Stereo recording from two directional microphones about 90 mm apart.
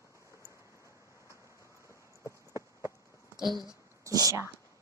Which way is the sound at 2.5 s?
35° right (ahead or behind).